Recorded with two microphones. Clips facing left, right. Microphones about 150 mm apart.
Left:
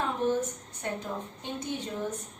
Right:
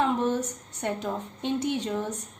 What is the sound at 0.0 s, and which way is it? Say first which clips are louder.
A woman's voice: right 3 dB; 80° right.